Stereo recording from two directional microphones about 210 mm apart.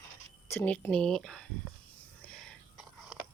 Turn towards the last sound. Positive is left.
turn(degrees=0)  # may be behind; listen again after turning